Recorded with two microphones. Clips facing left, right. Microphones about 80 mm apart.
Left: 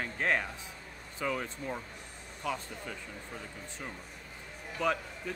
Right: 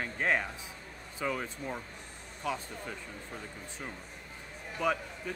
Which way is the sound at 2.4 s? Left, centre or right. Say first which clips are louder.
Right 1 dB; centre.